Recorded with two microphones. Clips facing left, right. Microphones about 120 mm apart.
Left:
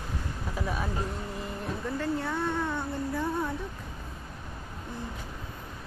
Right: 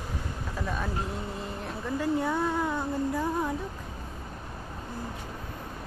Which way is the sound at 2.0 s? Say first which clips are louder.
Right 4 dB; 10° right (ahead or behind).